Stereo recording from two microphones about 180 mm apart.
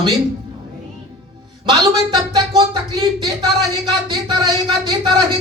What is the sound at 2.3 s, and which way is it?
Speech, 25° right (ahead or behind).